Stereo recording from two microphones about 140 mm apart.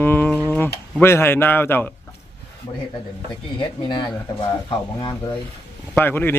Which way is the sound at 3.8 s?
35° left (ahead or behind).